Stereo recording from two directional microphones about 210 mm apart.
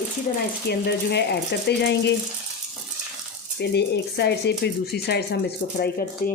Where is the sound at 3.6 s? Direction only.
50° left (ahead or behind).